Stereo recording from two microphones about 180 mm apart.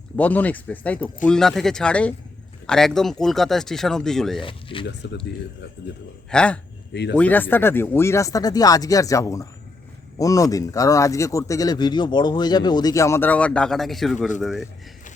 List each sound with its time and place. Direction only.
0.2 s speech: 10° left (ahead or behind)
4.4 s speech: 30° left (ahead or behind)
6.3 s speech: 5° left (ahead or behind)
6.9 s speech: 70° left (ahead or behind)
7.2 s speech: 10° left (ahead or behind)